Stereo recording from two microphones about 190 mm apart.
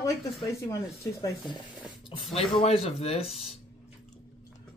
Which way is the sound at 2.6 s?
30° left (ahead or behind).